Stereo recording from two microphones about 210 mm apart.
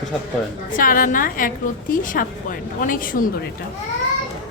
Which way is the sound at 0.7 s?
40° left (ahead or behind).